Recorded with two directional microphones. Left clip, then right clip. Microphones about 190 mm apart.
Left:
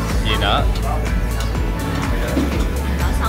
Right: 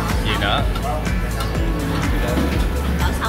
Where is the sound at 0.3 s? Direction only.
15° left (ahead or behind).